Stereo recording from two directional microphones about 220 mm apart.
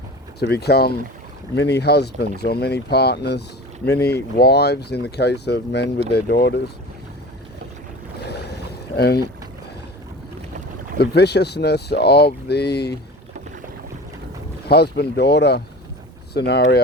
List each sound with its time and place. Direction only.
0.3 s speech: 45° left (ahead or behind)
8.2 s boat: 45° left (ahead or behind)
9.0 s speech: 45° left (ahead or behind)
10.9 s speech: 50° left (ahead or behind)
14.7 s speech: 50° left (ahead or behind)